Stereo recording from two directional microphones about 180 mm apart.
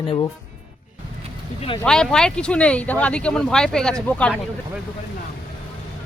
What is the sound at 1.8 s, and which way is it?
Speech, 5° left (ahead or behind).